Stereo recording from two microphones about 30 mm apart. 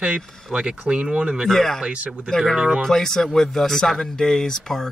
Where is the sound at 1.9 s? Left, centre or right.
Right.